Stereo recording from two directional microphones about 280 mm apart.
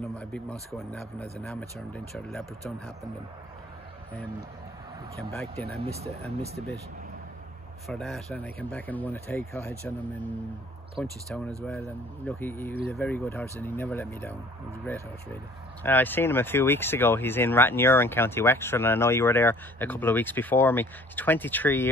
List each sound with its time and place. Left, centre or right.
0.2 s speech: centre
5.3 s speech: centre
5.8 s speech: right
7.9 s speech: centre
11.0 s speech: centre